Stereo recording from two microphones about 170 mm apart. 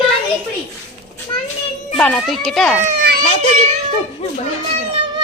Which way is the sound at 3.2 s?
35° left (ahead or behind).